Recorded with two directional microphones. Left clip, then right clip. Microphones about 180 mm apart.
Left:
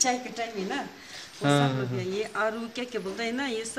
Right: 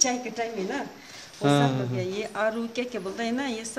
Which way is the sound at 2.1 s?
55° right (ahead or behind).